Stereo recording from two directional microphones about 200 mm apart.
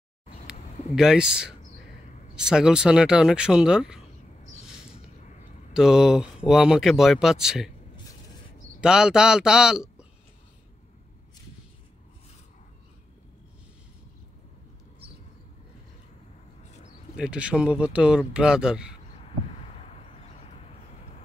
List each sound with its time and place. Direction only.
0.5 s a sound: 5° right (ahead or behind)
2.3 s speech: 5° right (ahead or behind)
4.6 s a sound: 5° right (ahead or behind)
5.7 s speech: 5° right (ahead or behind)
8.8 s speech: 5° right (ahead or behind)
17.2 s speech: 5° right (ahead or behind)
19.7 s vehicle: 35° left (ahead or behind)